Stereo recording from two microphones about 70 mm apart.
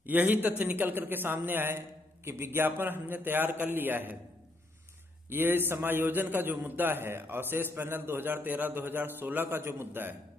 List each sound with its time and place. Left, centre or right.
0.0 s a man's voice: right
5.3 s a man's voice: right